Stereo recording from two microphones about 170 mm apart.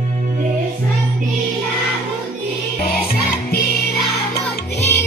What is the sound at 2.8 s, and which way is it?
Music, 65° left (ahead or behind).